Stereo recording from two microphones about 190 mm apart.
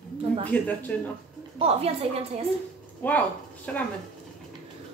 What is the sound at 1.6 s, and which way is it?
Speech, 30° right (ahead or behind).